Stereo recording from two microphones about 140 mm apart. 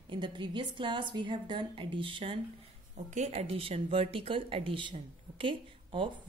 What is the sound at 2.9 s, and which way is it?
A woman's voice, 55° right (ahead or behind).